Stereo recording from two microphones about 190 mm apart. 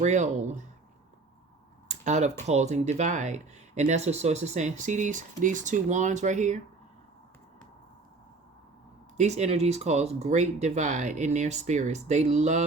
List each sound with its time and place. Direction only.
0.0 s speech: 35° right (ahead or behind)
1.9 s a sound: 40° right (ahead or behind)
2.5 s speech: 35° right (ahead or behind)
9.1 s speech: 35° right (ahead or behind)